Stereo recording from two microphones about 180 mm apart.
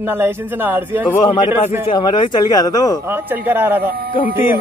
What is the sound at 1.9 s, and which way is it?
Speech, 25° left (ahead or behind).